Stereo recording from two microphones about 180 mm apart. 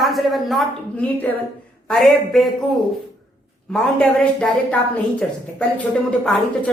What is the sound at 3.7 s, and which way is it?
A woman's voice, centre (ahead or behind).